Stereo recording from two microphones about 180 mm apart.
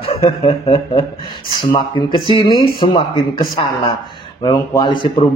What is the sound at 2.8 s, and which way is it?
A man's voice, 25° left (ahead or behind).